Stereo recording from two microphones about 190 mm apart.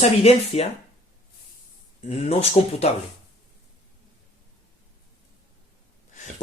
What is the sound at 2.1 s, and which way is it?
Speech, 35° left (ahead or behind).